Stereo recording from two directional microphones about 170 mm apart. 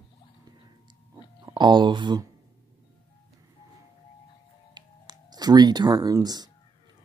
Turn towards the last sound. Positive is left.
turn(degrees=-25)  # may be behind; listen again after turning